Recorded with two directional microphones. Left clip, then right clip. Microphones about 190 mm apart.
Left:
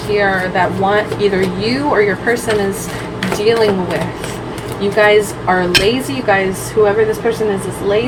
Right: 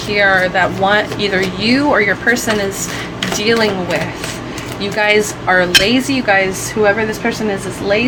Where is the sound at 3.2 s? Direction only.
45° right (ahead or behind).